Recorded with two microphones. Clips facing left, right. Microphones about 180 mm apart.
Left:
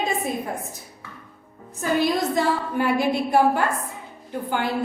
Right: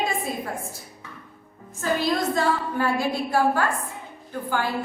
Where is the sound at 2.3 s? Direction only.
20° left (ahead or behind).